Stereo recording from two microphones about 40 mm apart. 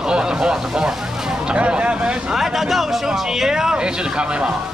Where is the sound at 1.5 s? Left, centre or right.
Right.